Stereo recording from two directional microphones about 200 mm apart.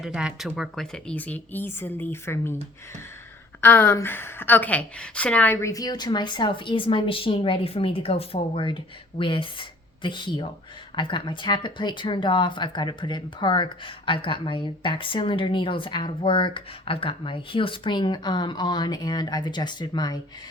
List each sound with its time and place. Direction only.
0.0 s speech: 5° right (ahead or behind); by 2.6 s 10° left (ahead or behind)
3.6 s speech: 10° left (ahead or behind)